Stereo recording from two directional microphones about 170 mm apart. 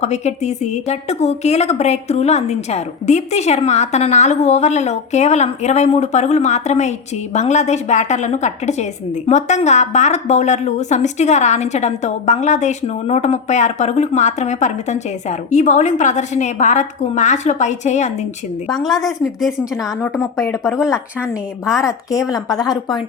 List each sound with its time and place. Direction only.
0.0 s a woman's voice: 40° left (ahead or behind)
18.7 s speech: centre (ahead or behind)
20.7 s speech: 5° right (ahead or behind)
21.8 s a woman's voice: 20° left (ahead or behind)